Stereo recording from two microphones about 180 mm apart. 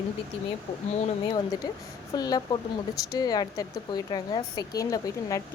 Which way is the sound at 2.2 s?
20° left (ahead or behind).